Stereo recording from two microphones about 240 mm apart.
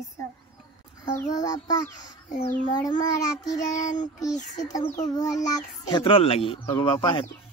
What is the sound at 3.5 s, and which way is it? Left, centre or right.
Child singing, left.